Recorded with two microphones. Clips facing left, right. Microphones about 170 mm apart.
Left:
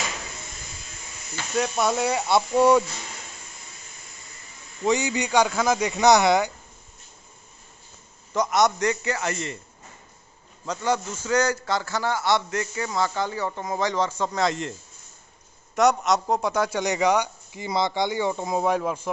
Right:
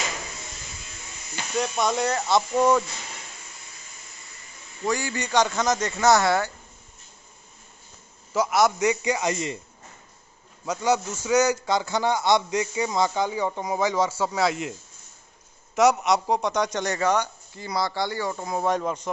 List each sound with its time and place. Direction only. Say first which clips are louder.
1.6 s speech: left 1 dB; 5° left (ahead or behind)
4.8 s speech: left 4 dB; 20° left (ahead or behind)
8.3 s a man's voice: even; 5° right (ahead or behind)
10.6 s a man's voice: right 2 dB; 10° right (ahead or behind)
16.8 s speech: left 2 dB; 15° left (ahead or behind)
18.7 s speech: right 2 dB; 5° left (ahead or behind)